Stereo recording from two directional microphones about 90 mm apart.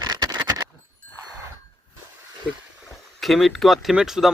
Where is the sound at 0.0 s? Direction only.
50° right (ahead or behind).